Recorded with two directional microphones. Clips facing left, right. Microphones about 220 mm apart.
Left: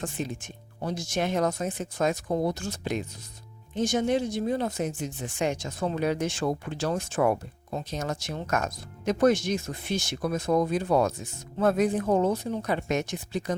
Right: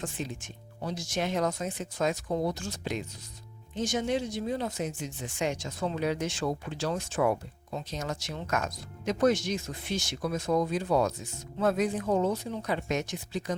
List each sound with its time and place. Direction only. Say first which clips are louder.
0.0 s speech: left 3 dB; 50° left (ahead or behind)